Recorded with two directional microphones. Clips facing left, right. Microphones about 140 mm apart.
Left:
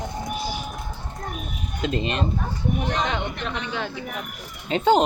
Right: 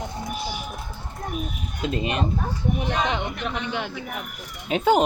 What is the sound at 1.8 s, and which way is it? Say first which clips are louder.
Speech: even; 10° right (ahead or behind).